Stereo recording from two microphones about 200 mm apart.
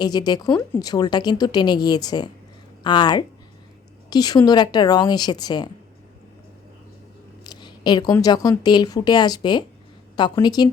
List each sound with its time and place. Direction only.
0.0 s a woman's voice: 20° left (ahead or behind)
7.4 s a woman's voice: 20° left (ahead or behind)